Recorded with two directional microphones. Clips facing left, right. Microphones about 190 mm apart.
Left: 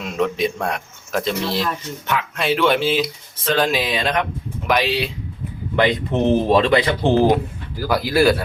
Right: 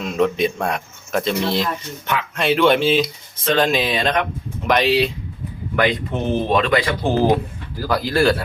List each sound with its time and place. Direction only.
0.0 s a man's voice: centre (ahead or behind)
5.7 s speech: 25° left (ahead or behind)
7.9 s speech: 10° left (ahead or behind)